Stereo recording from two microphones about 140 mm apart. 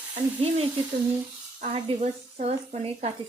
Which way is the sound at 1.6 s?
50° right (ahead or behind).